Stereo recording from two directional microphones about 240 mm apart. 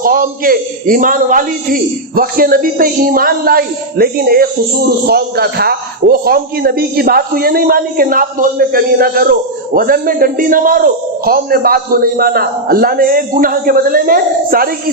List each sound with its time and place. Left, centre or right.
0.0 s a man's voice: right